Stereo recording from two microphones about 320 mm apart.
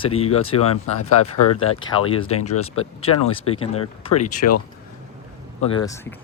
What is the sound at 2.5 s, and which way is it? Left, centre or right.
Speech, left.